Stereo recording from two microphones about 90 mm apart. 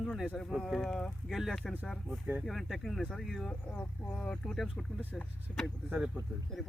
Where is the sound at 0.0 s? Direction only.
Centre (ahead or behind).